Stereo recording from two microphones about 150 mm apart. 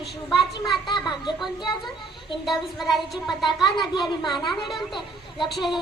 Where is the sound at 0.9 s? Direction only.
30° left (ahead or behind).